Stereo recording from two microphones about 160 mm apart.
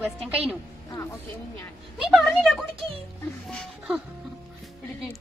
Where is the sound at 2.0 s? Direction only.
Centre (ahead or behind).